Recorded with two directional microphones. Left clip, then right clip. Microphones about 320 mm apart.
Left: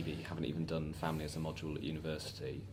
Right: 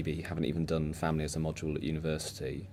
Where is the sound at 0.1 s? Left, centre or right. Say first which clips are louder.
Right 8 dB; right.